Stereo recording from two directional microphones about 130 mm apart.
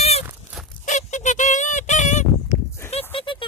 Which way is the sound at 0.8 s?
70° left (ahead or behind).